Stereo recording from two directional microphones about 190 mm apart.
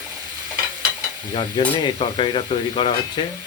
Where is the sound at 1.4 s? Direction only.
25° left (ahead or behind).